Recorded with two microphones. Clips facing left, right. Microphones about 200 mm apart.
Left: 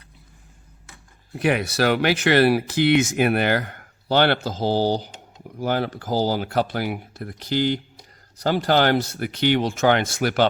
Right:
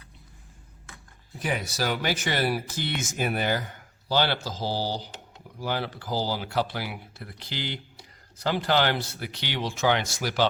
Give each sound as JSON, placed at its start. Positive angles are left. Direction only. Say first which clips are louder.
{"t": 1.3, "sound": "speech", "louder": "left 9 dB", "side_deg": 70}